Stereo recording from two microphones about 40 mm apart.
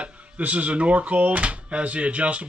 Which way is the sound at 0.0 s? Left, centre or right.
Right.